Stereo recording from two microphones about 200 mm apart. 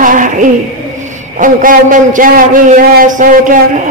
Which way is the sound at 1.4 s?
40° right (ahead or behind).